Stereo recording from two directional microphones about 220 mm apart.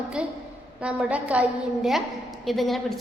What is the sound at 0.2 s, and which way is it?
A woman's voice, 5° right (ahead or behind).